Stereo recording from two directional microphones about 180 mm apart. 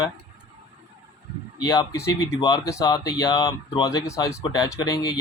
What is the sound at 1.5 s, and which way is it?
Speech, 20° left (ahead or behind).